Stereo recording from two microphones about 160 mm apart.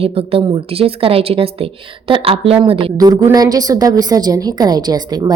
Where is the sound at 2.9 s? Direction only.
20° right (ahead or behind).